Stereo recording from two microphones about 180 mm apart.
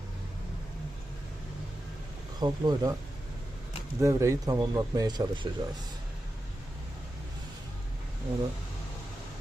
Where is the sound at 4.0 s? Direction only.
15° right (ahead or behind).